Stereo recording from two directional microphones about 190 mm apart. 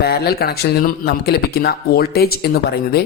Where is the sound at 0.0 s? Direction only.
55° left (ahead or behind).